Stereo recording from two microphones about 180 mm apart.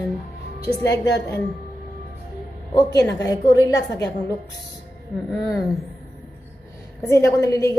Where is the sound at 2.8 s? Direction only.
20° left (ahead or behind).